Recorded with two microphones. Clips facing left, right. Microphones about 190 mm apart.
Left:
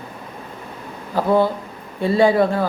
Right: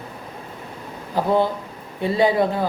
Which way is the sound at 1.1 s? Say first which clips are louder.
Left 2 dB; 20° right (ahead or behind).